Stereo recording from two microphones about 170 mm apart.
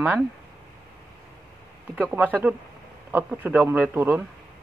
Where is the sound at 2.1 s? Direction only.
10° right (ahead or behind).